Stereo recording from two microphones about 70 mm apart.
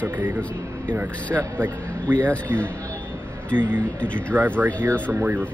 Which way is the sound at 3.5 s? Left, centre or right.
Right.